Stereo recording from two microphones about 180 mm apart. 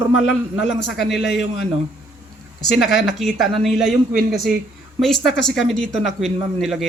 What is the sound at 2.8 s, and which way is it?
A man's voice, centre (ahead or behind).